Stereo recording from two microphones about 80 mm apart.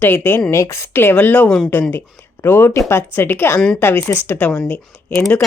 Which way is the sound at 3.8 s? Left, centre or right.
Left.